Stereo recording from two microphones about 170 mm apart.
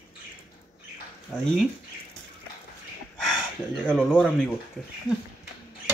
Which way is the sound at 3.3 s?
Centre (ahead or behind).